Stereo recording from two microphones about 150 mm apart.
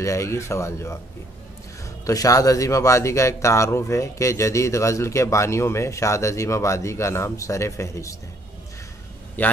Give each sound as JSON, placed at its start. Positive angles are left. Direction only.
{"t": 0.0, "sound": "a man's voice", "side_deg": 20}
{"t": 2.0, "sound": "a man's voice", "side_deg": 20}
{"t": 9.4, "sound": "a man's voice", "side_deg": 10}